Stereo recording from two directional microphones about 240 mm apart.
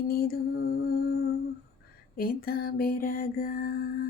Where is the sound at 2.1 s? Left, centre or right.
Left.